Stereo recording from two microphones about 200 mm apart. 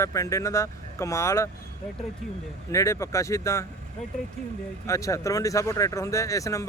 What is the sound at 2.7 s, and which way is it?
Speech, 15° left (ahead or behind).